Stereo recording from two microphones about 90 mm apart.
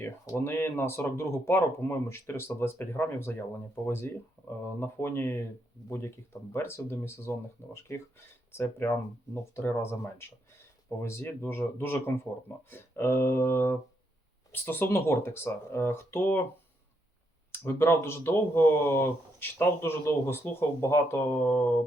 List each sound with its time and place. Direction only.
0.0 s speech: 25° left (ahead or behind)
4.4 s a sound: 5° left (ahead or behind)
4.8 s speech: 25° left (ahead or behind)
17.5 s speech: 25° left (ahead or behind)